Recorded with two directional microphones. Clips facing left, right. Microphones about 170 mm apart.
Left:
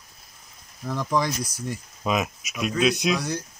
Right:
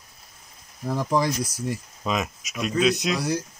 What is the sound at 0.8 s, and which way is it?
Speech, 35° right (ahead or behind).